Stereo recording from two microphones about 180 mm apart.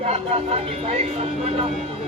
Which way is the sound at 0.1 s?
35° right (ahead or behind).